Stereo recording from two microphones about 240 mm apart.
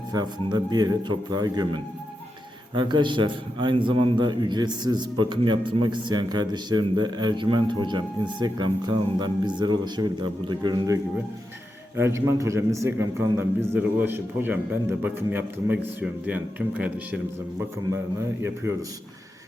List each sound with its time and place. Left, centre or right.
0.1 s a man's voice: centre
18.4 s a man's voice: centre